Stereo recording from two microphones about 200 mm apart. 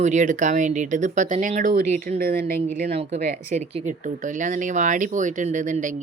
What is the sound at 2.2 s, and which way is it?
Speech, 50° right (ahead or behind).